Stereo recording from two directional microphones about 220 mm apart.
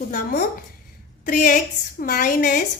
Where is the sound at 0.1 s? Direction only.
35° left (ahead or behind).